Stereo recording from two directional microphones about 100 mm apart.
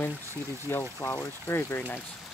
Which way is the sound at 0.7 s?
25° left (ahead or behind).